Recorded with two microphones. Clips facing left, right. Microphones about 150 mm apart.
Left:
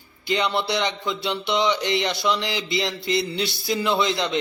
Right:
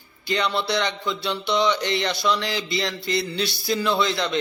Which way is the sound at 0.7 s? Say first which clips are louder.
Even; 20° left (ahead or behind).